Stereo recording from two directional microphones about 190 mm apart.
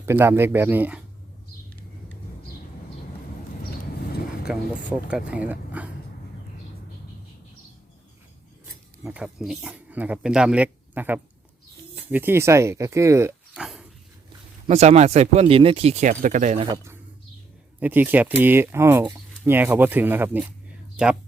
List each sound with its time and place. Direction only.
0.0 s speech: 10° right (ahead or behind)
4.4 s speech: 5° right (ahead or behind)
9.0 s speech: 5° right (ahead or behind)
14.7 s speech: 35° right (ahead or behind)
17.7 s speech: 10° right (ahead or behind)